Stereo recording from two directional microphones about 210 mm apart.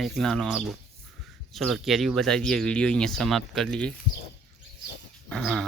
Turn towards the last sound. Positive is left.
turn(degrees=0)  # may be behind; listen again after turning